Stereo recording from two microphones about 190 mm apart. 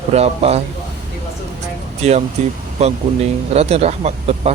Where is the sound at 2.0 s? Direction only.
35° right (ahead or behind).